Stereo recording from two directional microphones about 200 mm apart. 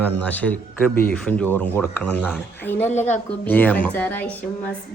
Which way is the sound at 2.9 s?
35° left (ahead or behind).